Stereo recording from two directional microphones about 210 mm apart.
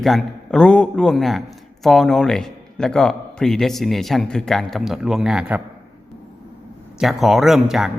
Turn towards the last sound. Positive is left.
turn(degrees=0)  # may be behind; listen again after turning